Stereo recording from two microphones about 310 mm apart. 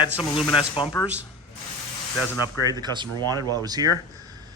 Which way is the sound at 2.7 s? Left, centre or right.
Centre.